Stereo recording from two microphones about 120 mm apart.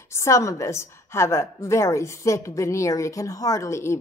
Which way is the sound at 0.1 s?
25° left (ahead or behind).